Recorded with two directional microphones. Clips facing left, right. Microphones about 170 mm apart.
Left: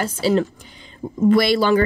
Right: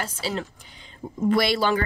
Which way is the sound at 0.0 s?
50° left (ahead or behind).